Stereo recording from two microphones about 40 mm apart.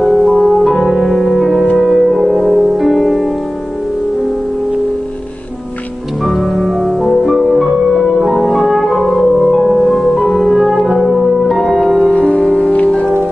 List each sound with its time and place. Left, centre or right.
0.0 s music: centre
6.2 s music: centre
12.1 s music: left